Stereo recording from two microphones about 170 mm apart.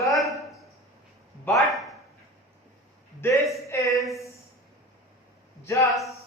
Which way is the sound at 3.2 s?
15° left (ahead or behind).